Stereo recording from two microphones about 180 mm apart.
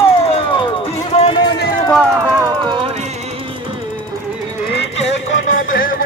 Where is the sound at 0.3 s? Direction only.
30° left (ahead or behind).